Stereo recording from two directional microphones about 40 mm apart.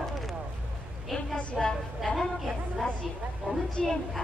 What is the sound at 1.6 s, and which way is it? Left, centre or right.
Speech, centre.